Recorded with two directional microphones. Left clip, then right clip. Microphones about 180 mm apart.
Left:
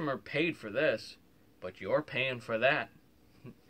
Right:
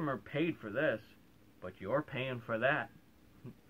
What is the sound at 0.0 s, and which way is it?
Speech, 20° left (ahead or behind).